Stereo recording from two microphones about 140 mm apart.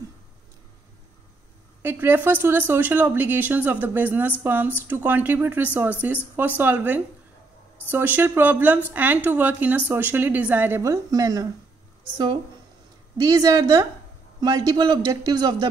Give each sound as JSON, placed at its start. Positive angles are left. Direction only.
{"t": 1.8, "sound": "speech", "side_deg": -15}
{"t": 13.2, "sound": "a man's voice", "side_deg": -25}